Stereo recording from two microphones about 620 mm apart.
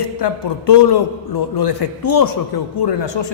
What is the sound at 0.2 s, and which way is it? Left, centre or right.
A man's voice, left.